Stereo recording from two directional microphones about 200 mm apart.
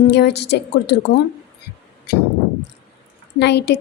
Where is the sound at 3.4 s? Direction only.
60° left (ahead or behind).